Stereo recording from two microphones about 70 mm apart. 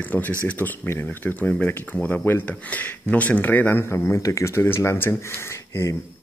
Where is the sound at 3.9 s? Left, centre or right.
Left.